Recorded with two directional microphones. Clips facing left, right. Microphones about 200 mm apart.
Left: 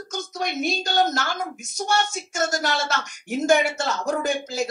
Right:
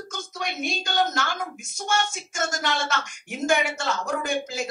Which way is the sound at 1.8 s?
40° left (ahead or behind).